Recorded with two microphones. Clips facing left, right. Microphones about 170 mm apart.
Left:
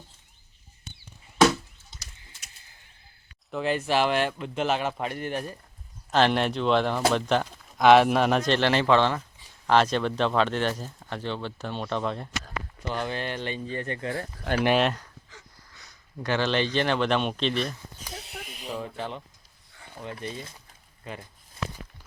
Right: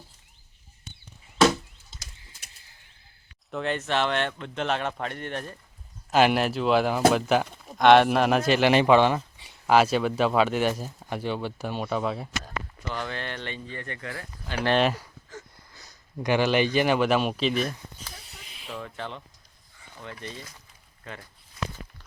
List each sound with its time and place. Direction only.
3.5 s speech: 5° left (ahead or behind)
6.1 s speech: 5° right (ahead or behind)
12.9 s speech: 20° left (ahead or behind)
13.7 s speech: 25° left (ahead or behind)
14.5 s speech: 85° left
14.8 s speech: 5° right (ahead or behind)
16.2 s speech: 10° right (ahead or behind)
18.1 s a sound: 70° left (ahead or behind)
18.7 s speech: 15° left (ahead or behind)